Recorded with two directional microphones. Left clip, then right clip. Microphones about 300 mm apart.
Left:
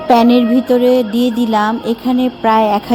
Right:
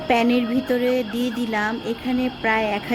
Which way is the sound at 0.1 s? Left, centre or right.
Centre.